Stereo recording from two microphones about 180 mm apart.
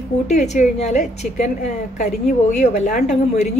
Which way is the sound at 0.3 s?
40° left (ahead or behind).